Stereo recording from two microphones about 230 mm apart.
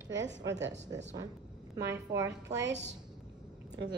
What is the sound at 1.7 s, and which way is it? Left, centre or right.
Speech, centre.